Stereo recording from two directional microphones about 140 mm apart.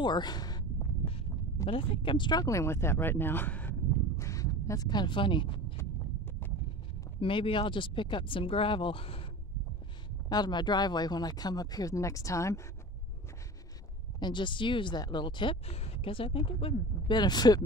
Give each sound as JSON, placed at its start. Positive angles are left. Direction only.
{"t": 0.0, "sound": "a sound", "side_deg": 30}
{"t": 1.7, "sound": "speech", "side_deg": 40}
{"t": 4.2, "sound": "a sound", "side_deg": 20}
{"t": 7.2, "sound": "speech", "side_deg": 40}
{"t": 10.3, "sound": "speech", "side_deg": 30}
{"t": 14.2, "sound": "speech", "side_deg": 35}